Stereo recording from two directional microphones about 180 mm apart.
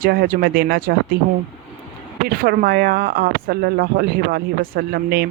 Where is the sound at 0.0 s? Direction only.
55° right (ahead or behind).